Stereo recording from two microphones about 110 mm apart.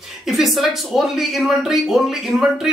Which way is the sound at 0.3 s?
Centre (ahead or behind).